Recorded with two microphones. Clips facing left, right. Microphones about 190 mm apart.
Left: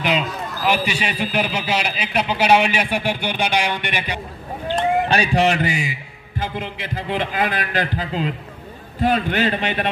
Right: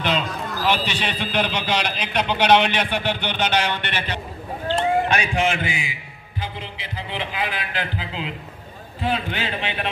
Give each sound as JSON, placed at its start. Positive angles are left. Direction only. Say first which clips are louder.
{"t": 0.0, "sound": "a man's voice", "louder": "left 2 dB", "side_deg": 5}
{"t": 5.0, "sound": "music", "louder": "left 4 dB", "side_deg": 35}
{"t": 6.4, "sound": "a man's voice", "louder": "left 6 dB", "side_deg": 45}
{"t": 9.0, "sound": "music", "louder": "left 6 dB", "side_deg": 45}